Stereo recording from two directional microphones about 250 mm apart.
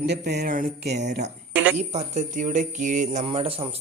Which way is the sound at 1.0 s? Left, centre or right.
Right.